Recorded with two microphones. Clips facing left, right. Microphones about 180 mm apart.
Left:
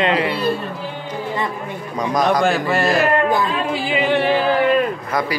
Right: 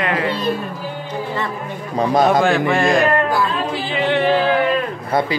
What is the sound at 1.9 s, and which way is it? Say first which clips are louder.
Speech: right 3 dB; 30° right (ahead or behind).